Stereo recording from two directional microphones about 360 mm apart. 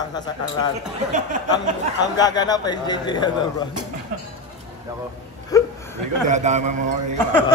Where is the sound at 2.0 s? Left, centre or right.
Centre.